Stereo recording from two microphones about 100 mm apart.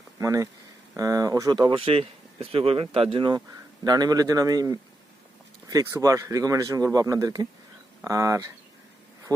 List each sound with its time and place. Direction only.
0.2 s speech: 35° right (ahead or behind)
1.7 s speech: 65° right (ahead or behind)
3.8 s speech: 40° right (ahead or behind)